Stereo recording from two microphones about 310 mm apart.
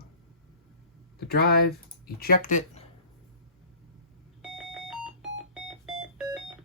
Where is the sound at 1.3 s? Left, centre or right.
Left.